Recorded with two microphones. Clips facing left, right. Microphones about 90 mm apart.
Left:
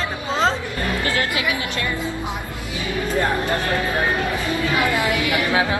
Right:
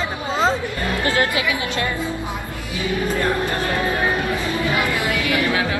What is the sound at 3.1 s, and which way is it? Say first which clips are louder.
Speech: even; 20° left (ahead or behind).